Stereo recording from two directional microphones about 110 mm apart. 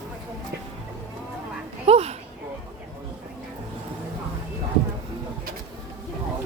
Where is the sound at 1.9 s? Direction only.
75° right (ahead or behind).